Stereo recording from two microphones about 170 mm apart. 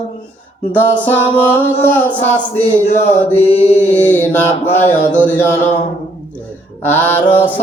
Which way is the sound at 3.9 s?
10° left (ahead or behind).